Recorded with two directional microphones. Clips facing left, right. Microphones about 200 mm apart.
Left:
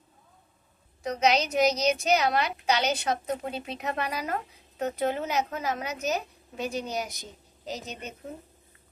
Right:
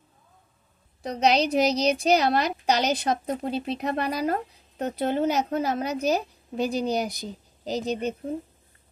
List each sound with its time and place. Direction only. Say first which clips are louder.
1.0 s a woman's voice: right 3 dB; 35° right (ahead or behind)